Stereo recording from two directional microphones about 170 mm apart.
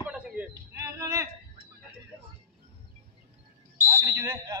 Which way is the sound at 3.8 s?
15° right (ahead or behind).